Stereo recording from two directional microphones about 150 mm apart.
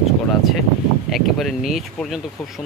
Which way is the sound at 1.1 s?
Centre (ahead or behind).